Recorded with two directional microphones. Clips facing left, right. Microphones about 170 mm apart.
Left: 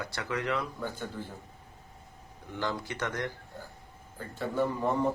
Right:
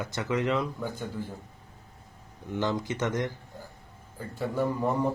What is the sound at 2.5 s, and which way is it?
Speech, 20° right (ahead or behind).